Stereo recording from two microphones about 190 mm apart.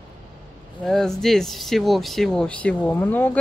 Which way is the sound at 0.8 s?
Centre (ahead or behind).